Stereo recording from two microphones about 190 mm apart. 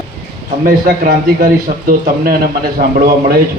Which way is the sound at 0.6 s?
50° right (ahead or behind).